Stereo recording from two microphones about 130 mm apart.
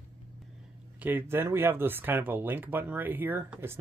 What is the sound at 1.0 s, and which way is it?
Speech, 15° right (ahead or behind).